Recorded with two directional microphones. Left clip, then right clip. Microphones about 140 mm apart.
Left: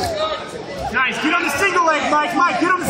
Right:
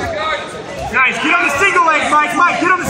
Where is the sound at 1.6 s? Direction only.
50° left (ahead or behind).